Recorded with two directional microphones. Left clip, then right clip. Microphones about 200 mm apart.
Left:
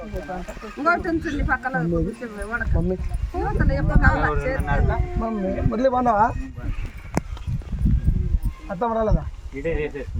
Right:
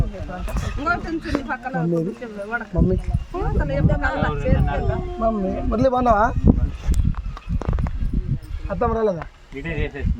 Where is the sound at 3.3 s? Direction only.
40° right (ahead or behind).